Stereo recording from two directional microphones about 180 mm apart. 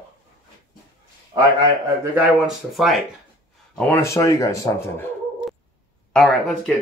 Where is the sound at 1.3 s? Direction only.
20° right (ahead or behind).